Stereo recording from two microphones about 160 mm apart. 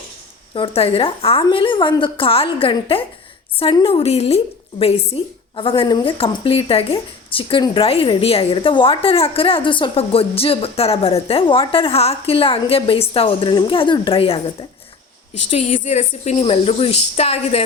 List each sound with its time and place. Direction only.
0.5 s a woman's voice: 35° left (ahead or behind)